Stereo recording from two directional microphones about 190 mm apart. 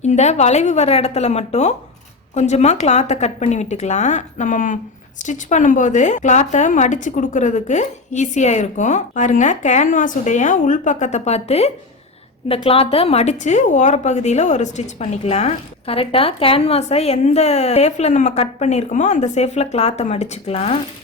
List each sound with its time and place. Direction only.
0.0 s a woman's voice: 35° left (ahead or behind)